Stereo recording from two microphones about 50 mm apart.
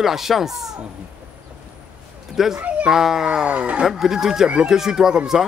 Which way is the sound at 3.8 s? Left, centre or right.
Centre.